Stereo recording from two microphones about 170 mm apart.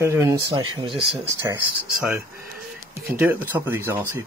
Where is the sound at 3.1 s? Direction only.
10° right (ahead or behind).